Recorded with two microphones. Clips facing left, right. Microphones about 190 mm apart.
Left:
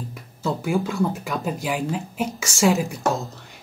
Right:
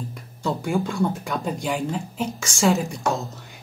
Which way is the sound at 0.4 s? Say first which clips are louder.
Left 1 dB; centre (ahead or behind).